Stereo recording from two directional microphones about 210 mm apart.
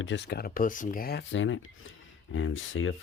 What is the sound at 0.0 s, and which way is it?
Speech, 55° left (ahead or behind).